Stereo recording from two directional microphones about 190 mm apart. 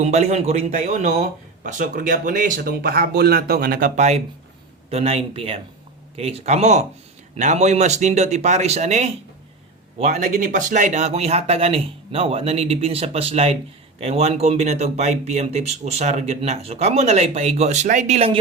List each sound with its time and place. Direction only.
0.0 s speech: 35° right (ahead or behind)